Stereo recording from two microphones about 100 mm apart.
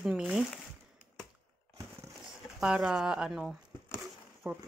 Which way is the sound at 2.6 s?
10° right (ahead or behind).